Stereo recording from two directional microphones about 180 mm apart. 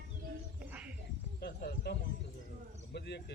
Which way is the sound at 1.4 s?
60° left (ahead or behind).